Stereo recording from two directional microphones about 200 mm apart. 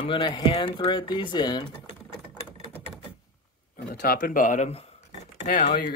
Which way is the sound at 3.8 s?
50° left (ahead or behind).